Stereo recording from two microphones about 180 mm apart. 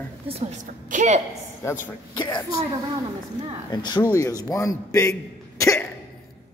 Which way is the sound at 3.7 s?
25° left (ahead or behind).